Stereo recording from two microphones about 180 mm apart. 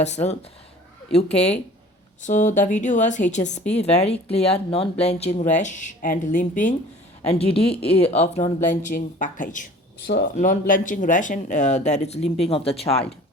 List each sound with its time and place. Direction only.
0.0 s speech: 40° left (ahead or behind)
7.3 s speech: 35° left (ahead or behind)